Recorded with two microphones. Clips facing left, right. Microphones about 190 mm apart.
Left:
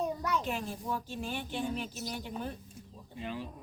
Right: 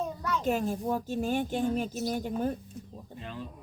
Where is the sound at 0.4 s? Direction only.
45° right (ahead or behind).